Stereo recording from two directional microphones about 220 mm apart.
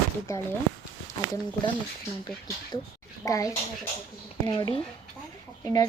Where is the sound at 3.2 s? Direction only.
15° left (ahead or behind).